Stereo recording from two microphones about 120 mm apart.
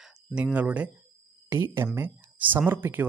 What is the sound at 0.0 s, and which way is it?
Speech, 10° right (ahead or behind).